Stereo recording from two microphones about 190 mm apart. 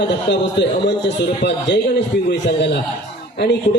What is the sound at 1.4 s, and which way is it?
Speech, 65° left (ahead or behind).